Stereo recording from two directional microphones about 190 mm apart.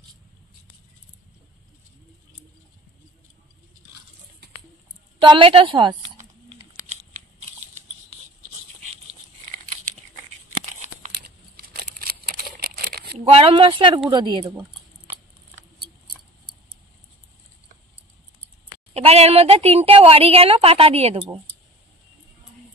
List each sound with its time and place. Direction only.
5.2 s a woman's voice: 25° right (ahead or behind)
6.7 s a sound: 40° right (ahead or behind)
10.7 s crumpling: 40° right (ahead or behind)
11.1 s a sound: 55° right (ahead or behind)
13.0 s speech: 30° right (ahead or behind)
18.9 s a woman's voice: 35° right (ahead or behind)